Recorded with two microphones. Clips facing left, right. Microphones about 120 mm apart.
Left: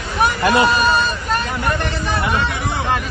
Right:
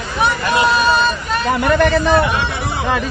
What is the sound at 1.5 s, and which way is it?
Speech, 90° right.